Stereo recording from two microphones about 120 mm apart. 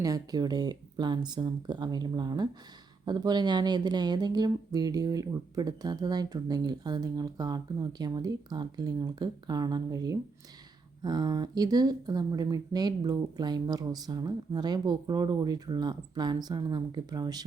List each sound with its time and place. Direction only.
0.0 s speech: 30° right (ahead or behind)